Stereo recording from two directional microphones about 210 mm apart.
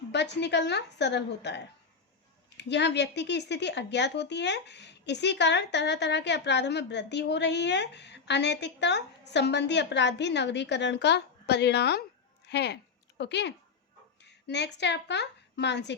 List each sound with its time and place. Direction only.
0.1 s a woman's voice: 55° left (ahead or behind)